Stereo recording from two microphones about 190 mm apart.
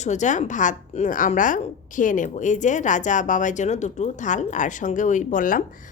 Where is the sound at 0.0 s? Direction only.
40° left (ahead or behind).